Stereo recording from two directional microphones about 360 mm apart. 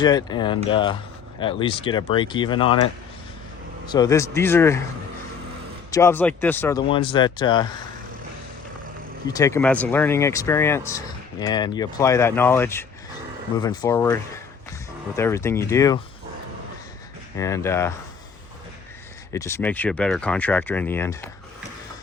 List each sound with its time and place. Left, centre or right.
0.0 s speech: centre
3.9 s speech: centre
5.9 s speech: centre
9.2 s speech: centre
17.3 s speech: centre
19.3 s speech: centre